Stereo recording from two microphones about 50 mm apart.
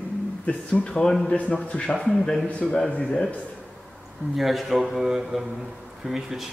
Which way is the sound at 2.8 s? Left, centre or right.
Left.